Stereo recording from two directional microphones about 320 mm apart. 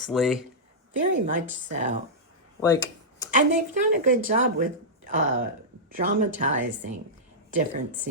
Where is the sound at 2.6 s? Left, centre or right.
Centre.